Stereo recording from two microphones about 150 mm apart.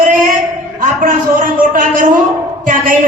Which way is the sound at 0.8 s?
65° right (ahead or behind).